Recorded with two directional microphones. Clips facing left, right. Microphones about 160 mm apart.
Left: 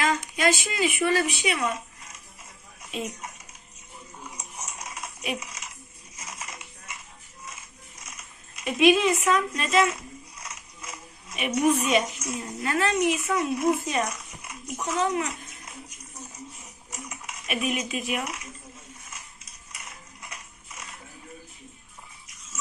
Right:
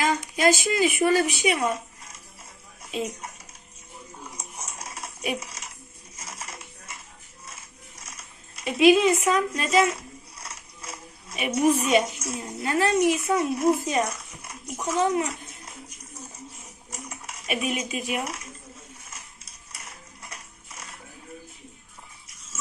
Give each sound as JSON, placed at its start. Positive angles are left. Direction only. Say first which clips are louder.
{"t": 0.0, "sound": "a woman's voice", "louder": "right 2 dB", "side_deg": -35}
{"t": 1.5, "sound": "speech", "louder": "right 3 dB", "side_deg": -30}
{"t": 2.9, "sound": "speech", "louder": "right 3 dB", "side_deg": -30}
{"t": 4.6, "sound": "music", "louder": "even", "side_deg": -30}
{"t": 5.4, "sound": "a sound", "louder": "right 1 dB", "side_deg": -30}
{"t": 12.6, "sound": "a child's voice", "louder": "right 3 dB", "side_deg": -30}
{"t": 16.9, "sound": "typewriter", "louder": "even", "side_deg": -30}
{"t": 17.9, "sound": "speech", "louder": "right 1 dB", "side_deg": -35}
{"t": 20.2, "sound": "a sound", "louder": "even", "side_deg": -35}